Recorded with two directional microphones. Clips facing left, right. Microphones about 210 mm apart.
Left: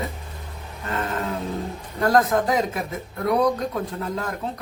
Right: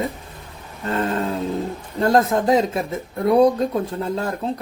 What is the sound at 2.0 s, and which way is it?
Speech, 25° right (ahead or behind).